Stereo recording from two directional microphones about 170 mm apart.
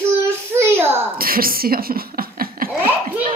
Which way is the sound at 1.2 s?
60° right (ahead or behind).